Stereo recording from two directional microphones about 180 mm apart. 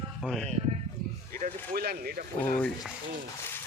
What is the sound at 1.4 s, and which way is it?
Speech, 55° right (ahead or behind).